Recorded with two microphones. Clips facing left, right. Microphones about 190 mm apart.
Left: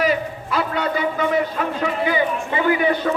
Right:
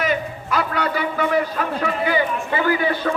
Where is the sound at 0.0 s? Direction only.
30° left (ahead or behind).